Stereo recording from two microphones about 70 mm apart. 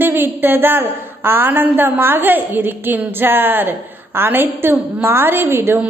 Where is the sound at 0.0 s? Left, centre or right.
Right.